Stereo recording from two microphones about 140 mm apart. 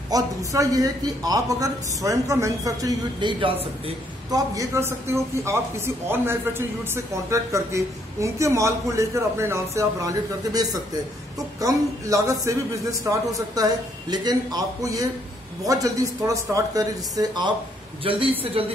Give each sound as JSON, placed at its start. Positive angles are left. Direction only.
{"t": 0.1, "sound": "a woman's voice", "side_deg": -25}
{"t": 4.3, "sound": "a woman's voice", "side_deg": -20}
{"t": 18.0, "sound": "a man's voice", "side_deg": -40}